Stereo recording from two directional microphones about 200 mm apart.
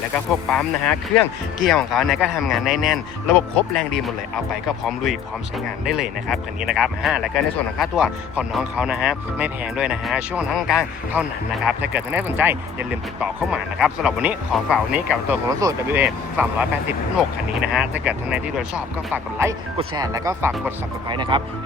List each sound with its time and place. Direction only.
0.1 s speech: 5° left (ahead or behind)
5.8 s speech: centre (ahead or behind); by 21.4 s 25° right (ahead or behind)